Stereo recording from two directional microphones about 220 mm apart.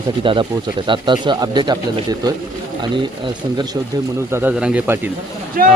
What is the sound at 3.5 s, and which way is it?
Speech, 20° right (ahead or behind).